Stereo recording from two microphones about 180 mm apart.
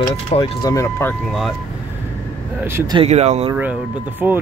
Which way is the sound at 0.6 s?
20° left (ahead or behind).